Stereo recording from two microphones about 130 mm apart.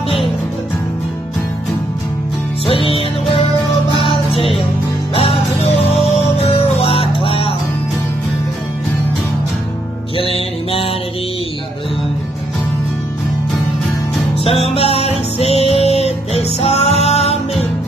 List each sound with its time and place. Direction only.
2.6 s music: 45° left (ahead or behind)
10.1 s music: 45° left (ahead or behind)
14.4 s music: 50° left (ahead or behind)